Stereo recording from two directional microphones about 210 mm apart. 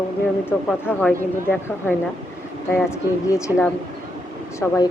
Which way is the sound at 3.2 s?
15° left (ahead or behind).